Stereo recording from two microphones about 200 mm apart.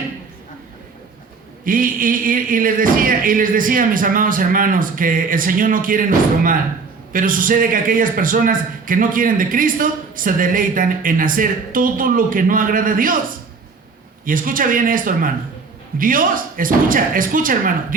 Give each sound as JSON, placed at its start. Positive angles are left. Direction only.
{"t": 1.6, "sound": "a man's voice", "side_deg": -45}
{"t": 14.3, "sound": "a man's voice", "side_deg": -45}